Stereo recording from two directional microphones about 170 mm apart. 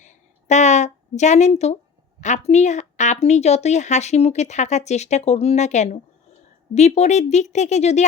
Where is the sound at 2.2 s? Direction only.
40° left (ahead or behind).